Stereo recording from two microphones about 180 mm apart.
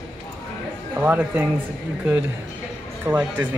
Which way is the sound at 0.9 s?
10° right (ahead or behind).